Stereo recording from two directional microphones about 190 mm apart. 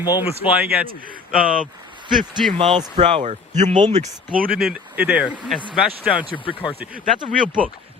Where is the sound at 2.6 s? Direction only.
30° right (ahead or behind).